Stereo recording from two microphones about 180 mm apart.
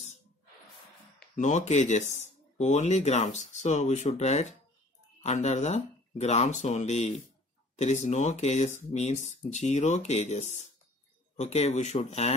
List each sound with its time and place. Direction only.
1.3 s speech: 40° left (ahead or behind)